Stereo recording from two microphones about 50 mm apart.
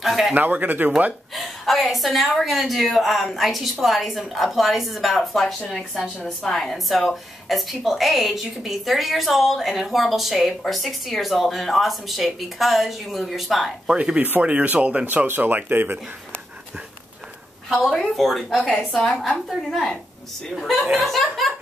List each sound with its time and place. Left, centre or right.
0.0 s a sound: centre
0.3 s speech: right
1.3 s a woman's voice: centre
13.8 s speech: right
15.0 s speech: right
17.6 s a woman's voice: centre